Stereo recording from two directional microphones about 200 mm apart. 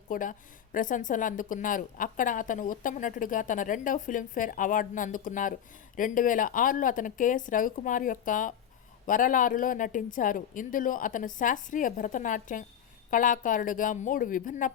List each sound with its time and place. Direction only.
0.1 s a woman's voice: 40° left (ahead or behind)